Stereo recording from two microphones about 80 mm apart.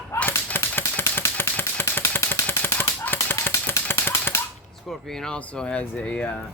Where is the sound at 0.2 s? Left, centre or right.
Left.